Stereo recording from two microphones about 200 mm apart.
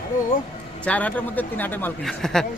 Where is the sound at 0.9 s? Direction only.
5° left (ahead or behind).